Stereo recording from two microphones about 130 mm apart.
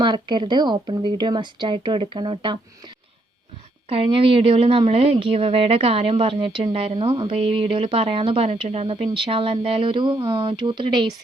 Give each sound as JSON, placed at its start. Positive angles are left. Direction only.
{"t": 0.0, "sound": "a woman's voice", "side_deg": -35}